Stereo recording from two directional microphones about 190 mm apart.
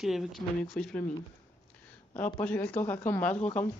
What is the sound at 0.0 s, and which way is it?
Speech, centre (ahead or behind).